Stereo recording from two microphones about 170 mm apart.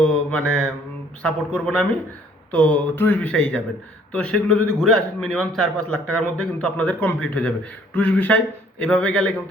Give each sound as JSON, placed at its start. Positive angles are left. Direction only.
{"t": 0.0, "sound": "mantra", "side_deg": 5}
{"t": 1.2, "sound": "a man's voice", "side_deg": 5}